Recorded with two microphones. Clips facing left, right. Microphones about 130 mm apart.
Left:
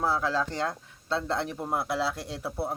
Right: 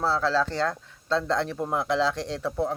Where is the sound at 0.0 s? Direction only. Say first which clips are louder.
Right 3 dB; 15° left (ahead or behind).